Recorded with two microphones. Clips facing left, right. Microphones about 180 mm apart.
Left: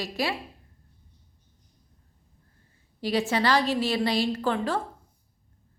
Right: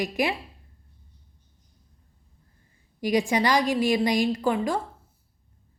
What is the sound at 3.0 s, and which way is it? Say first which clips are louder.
A woman's voice: right 2 dB; 15° right (ahead or behind).